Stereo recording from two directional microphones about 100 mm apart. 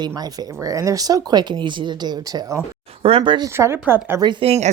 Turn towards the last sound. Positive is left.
turn(degrees=-50)  # may be behind; listen again after turning